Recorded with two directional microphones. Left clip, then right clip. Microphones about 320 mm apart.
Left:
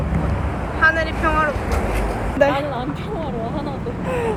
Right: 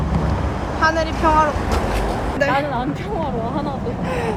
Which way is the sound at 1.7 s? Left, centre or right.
Right.